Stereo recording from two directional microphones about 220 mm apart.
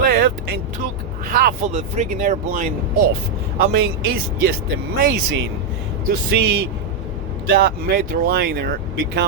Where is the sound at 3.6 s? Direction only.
45° right (ahead or behind).